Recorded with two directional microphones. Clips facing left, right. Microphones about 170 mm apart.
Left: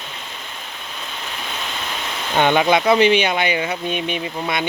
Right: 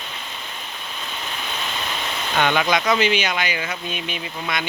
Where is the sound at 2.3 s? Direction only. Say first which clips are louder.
Left 4 dB; 20° left (ahead or behind).